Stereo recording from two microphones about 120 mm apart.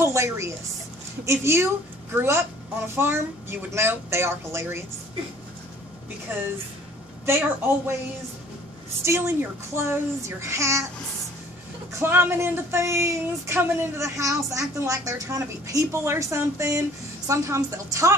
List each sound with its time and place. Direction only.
0.0 s speech: 25° right (ahead or behind)
7.2 s speech: 20° right (ahead or behind)
9.0 s speech: 20° right (ahead or behind)
12.0 s speech: 20° right (ahead or behind)